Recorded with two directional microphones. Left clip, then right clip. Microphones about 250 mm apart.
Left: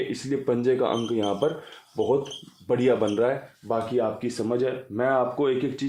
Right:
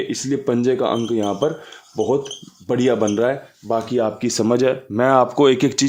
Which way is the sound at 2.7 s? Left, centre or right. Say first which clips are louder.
Right 4 dB; right.